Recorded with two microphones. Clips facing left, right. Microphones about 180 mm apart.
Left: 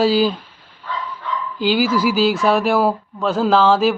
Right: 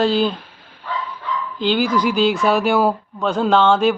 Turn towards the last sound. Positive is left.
turn(degrees=0)  # may be behind; listen again after turning